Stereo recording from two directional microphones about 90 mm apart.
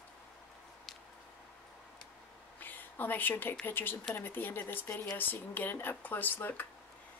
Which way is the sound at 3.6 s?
20° left (ahead or behind).